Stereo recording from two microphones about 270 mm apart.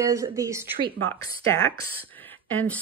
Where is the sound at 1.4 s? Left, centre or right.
Centre.